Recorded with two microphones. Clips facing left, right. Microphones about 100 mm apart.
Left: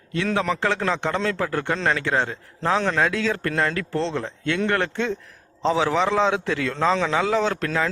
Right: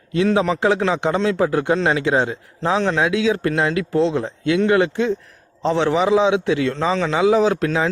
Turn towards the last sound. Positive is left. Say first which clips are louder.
# right 5 dB
turn(degrees=-15)  # may be behind; listen again after turning